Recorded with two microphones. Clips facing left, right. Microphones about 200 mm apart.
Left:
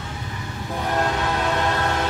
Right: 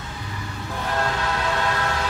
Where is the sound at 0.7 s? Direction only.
15° left (ahead or behind).